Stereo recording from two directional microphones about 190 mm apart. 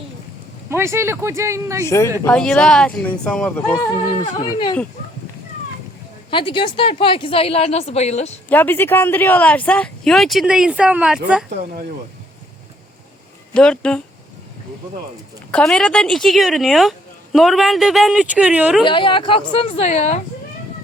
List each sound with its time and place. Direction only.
0.7 s speech: 15° right (ahead or behind)
1.8 s speech: 15° left (ahead or behind)
2.2 s speech: 5° left (ahead or behind)
4.4 s speech: 25° left (ahead or behind)
6.3 s speech: 25° left (ahead or behind)
8.4 s speech: 10° left (ahead or behind)
13.5 s speech: 5° left (ahead or behind)
15.5 s speech: 5° left (ahead or behind)
18.9 s speech: 25° left (ahead or behind)